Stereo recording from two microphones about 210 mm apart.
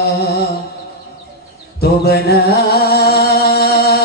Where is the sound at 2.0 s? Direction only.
50° left (ahead or behind).